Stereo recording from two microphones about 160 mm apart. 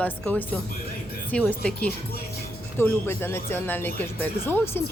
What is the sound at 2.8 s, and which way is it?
Speech, 15° left (ahead or behind).